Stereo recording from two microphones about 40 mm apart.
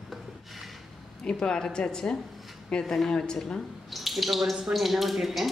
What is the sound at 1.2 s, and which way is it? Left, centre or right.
Speech, left.